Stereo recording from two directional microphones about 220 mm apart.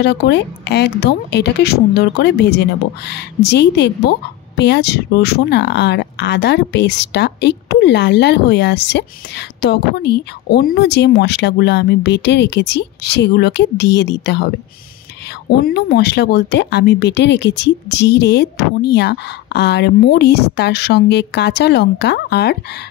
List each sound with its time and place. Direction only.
0.0 s speech: 50° left (ahead or behind)
15.5 s speech: 45° left (ahead or behind)